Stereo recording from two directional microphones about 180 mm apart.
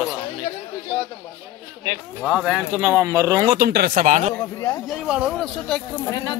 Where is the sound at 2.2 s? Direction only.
5° right (ahead or behind).